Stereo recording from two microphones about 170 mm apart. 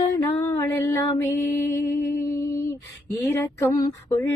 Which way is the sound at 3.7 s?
20° left (ahead or behind).